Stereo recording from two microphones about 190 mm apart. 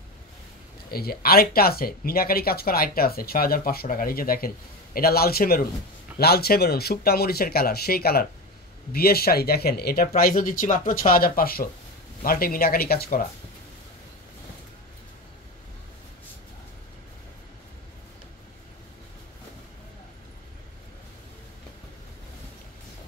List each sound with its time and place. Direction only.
0.8 s speech: 50° left (ahead or behind)